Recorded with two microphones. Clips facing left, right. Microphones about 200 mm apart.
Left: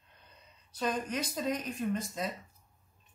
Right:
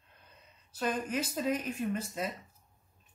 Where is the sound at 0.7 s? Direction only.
5° right (ahead or behind).